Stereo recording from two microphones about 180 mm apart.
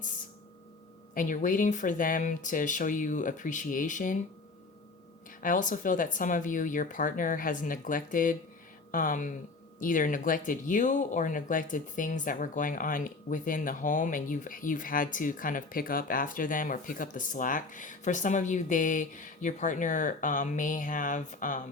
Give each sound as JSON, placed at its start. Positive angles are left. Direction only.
{"t": 1.1, "sound": "speech", "side_deg": 45}
{"t": 5.4, "sound": "speech", "side_deg": 45}